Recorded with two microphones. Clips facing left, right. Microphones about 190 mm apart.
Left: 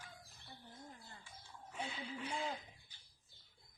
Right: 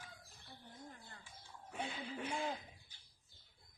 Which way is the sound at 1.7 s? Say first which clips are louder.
Right 1 dB; 60° right (ahead or behind).